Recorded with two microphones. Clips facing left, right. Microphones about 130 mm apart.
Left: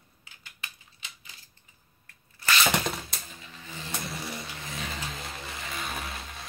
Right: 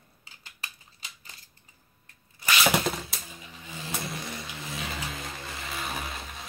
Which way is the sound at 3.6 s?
10° right (ahead or behind).